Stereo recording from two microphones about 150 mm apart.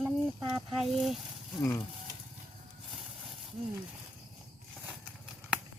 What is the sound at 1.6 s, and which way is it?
Speech, 20° left (ahead or behind).